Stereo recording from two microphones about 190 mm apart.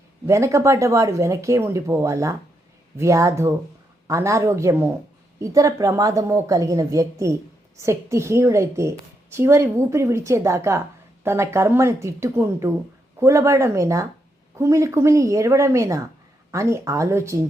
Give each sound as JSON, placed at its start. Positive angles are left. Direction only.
{"t": 0.3, "sound": "a woman's voice", "side_deg": -15}